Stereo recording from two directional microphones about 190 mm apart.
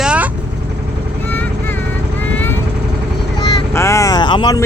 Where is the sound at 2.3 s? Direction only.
10° left (ahead or behind).